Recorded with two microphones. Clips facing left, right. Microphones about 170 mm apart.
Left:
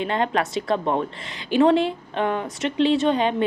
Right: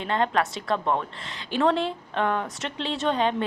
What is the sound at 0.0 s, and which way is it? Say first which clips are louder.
A woman's voice: left 2 dB; 15° left (ahead or behind).